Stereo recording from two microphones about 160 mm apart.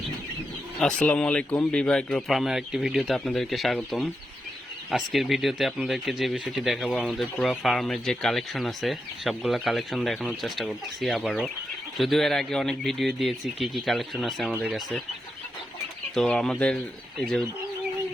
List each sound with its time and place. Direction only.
0.8 s speech: 5° left (ahead or behind)
16.1 s speech: 5° left (ahead or behind)